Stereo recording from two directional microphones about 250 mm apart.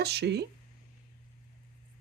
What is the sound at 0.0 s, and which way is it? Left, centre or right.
Speech, right.